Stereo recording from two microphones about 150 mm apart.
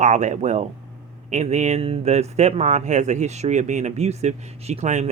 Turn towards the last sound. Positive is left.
turn(degrees=-50)  # may be behind; listen again after turning